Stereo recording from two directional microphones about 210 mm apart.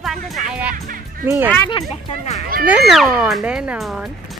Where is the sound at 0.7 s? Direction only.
40° right (ahead or behind).